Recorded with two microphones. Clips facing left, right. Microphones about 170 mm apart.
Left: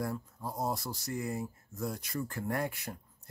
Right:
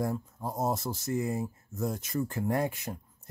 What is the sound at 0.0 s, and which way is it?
Speech, 20° right (ahead or behind).